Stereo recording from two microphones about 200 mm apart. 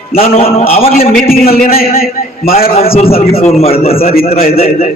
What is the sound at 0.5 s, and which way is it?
Speech, 30° left (ahead or behind).